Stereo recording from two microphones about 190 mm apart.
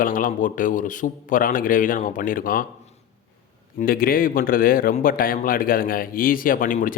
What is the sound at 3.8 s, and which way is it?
A man's voice, 50° left (ahead or behind).